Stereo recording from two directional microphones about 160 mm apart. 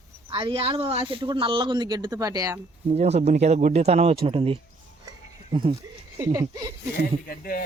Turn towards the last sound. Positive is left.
turn(degrees=65)  # may be behind; listen again after turning